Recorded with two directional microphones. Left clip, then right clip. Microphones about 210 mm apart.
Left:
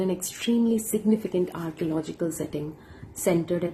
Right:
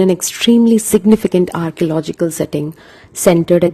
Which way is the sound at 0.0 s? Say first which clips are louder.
Right 15 dB; 50° right (ahead or behind).